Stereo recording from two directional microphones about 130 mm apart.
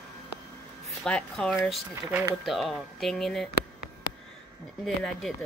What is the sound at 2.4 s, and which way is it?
A woman's voice, centre (ahead or behind).